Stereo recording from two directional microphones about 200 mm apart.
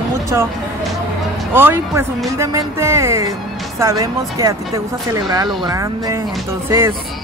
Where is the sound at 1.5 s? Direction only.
10° right (ahead or behind).